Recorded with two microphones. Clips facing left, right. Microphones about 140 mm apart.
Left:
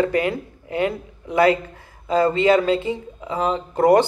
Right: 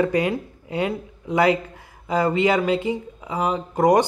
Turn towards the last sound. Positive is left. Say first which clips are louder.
# left 2 dB
turn(degrees=-15)  # may be behind; listen again after turning